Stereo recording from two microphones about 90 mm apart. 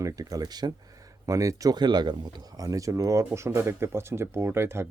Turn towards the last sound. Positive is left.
turn(degrees=-25)  # may be behind; listen again after turning